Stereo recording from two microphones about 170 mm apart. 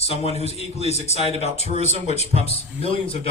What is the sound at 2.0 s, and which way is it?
A man's voice, 40° left (ahead or behind).